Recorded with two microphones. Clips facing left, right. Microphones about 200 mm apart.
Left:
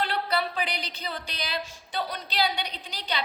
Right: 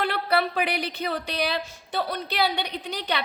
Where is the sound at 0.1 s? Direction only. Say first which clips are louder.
Right 4 dB; 60° right (ahead or behind).